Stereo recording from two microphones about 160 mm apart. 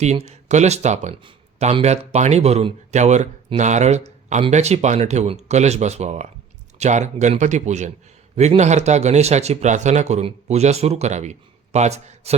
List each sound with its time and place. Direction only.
0.0 s speech: 45° right (ahead or behind)